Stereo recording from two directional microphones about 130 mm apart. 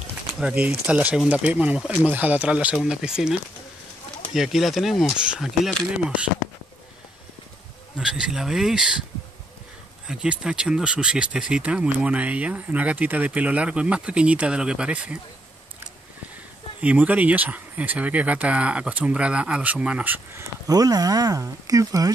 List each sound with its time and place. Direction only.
0.4 s speech: 5° right (ahead or behind)
8.0 s speech: 5° right (ahead or behind)
10.0 s speech: 5° right (ahead or behind)
16.8 s speech: 10° right (ahead or behind)
20.6 s speech: 30° right (ahead or behind)